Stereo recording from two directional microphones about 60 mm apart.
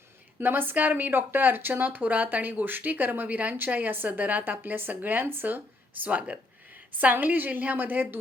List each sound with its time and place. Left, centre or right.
0.3 s speech: right